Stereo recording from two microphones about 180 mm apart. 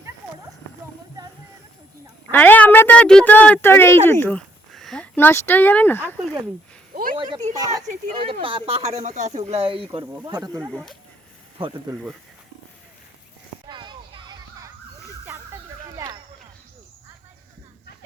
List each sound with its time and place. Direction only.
2.3 s speech: 10° left (ahead or behind)
6.9 s a sound: 50° right (ahead or behind)
7.2 s speech: 25° right (ahead or behind)
10.7 s speech: 5° left (ahead or behind)
11.5 s speech: 25° right (ahead or behind)
13.7 s children playing: 25° right (ahead or behind)
16.0 s a sound: 15° right (ahead or behind)